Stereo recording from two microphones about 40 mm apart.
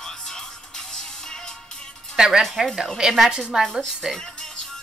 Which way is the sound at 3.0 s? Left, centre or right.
Centre.